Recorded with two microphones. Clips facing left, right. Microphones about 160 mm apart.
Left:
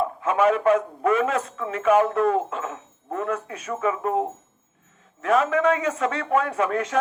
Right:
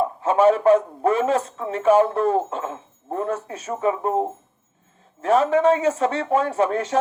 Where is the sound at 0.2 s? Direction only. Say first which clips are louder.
Right 4 dB; 30° right (ahead or behind).